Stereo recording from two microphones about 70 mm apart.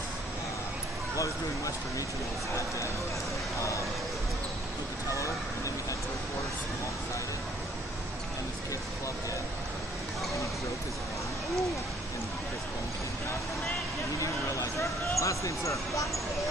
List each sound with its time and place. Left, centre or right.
1.1 s speech: left
14.2 s speech: left